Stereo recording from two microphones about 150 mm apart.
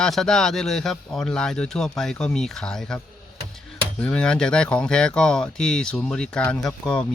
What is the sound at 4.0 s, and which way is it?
A man's voice, 5° left (ahead or behind).